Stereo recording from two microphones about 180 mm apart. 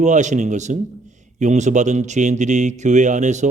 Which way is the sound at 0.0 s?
40° right (ahead or behind).